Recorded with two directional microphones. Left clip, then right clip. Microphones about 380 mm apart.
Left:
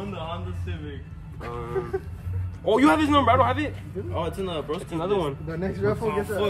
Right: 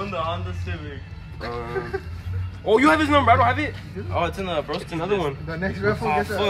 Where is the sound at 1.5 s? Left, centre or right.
Centre.